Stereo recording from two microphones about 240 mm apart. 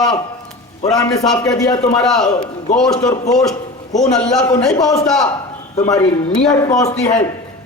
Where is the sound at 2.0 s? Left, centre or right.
Centre.